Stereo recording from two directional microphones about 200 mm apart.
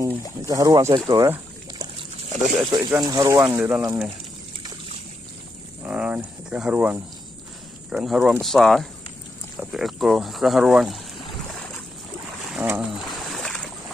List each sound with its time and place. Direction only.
0.4 s speech: 15° right (ahead or behind)
5.8 s speech: 10° right (ahead or behind)
12.5 s a sound: 10° right (ahead or behind)